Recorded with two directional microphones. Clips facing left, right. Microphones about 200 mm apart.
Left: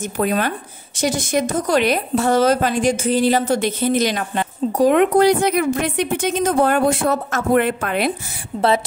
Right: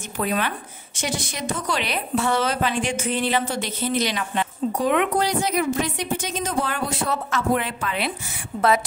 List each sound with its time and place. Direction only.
0.2 s a woman's voice: 45° left (ahead or behind)
5.2 s speech: 60° left (ahead or behind)
8.5 s speech: 30° left (ahead or behind)